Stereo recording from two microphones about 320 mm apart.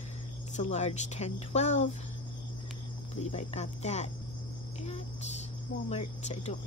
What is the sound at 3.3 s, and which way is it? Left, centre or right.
Speech, left.